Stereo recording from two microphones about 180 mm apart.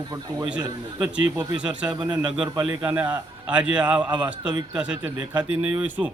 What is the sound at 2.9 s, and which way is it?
Speech, 10° right (ahead or behind).